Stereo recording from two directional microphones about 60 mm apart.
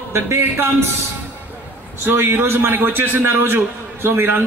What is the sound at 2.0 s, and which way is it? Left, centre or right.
A man's voice, right.